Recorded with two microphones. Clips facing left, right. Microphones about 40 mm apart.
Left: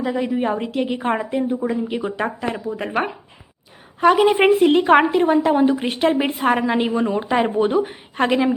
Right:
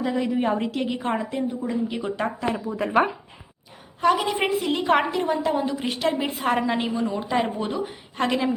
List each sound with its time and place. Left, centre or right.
0.0 s a woman's voice: centre
0.9 s a woman's voice: left
1.9 s a woman's voice: centre
4.0 s speech: left
4.8 s a woman's voice: left
6.9 s speech: left